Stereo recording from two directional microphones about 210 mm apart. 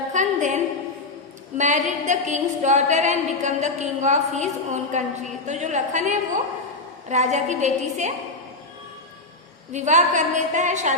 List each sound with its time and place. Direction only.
0.1 s a sound: 35° right (ahead or behind)
1.5 s a woman's voice: 35° right (ahead or behind)
9.7 s a woman's voice: 35° right (ahead or behind)